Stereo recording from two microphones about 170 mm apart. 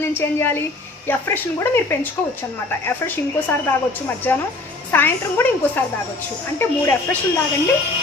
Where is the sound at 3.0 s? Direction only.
20° left (ahead or behind).